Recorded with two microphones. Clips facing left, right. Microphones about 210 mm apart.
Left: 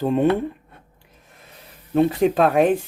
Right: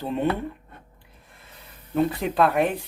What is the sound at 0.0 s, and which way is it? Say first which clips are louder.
Speech: left 7 dB; 50° left (ahead or behind).